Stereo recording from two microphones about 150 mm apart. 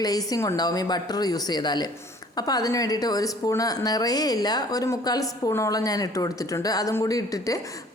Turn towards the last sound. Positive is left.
turn(degrees=25)  # may be behind; listen again after turning